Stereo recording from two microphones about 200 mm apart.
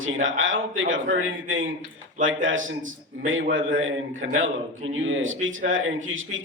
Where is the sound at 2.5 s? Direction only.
80° right.